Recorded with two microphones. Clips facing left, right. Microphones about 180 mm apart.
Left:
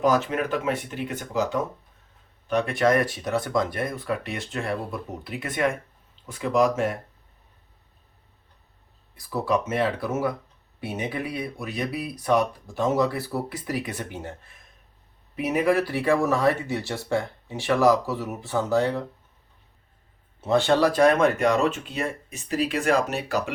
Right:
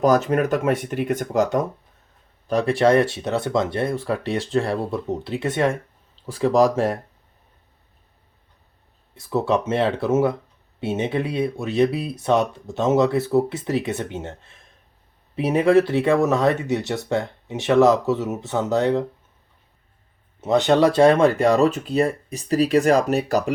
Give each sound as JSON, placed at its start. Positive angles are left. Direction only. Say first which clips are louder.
{"t": 0.0, "sound": "speech", "louder": "right 5 dB", "side_deg": -40}
{"t": 2.5, "sound": "speech", "louder": "right 4 dB", "side_deg": -35}
{"t": 9.1, "sound": "speech", "louder": "right 4 dB", "side_deg": -25}
{"t": 20.4, "sound": "speech", "louder": "right 4 dB", "side_deg": -20}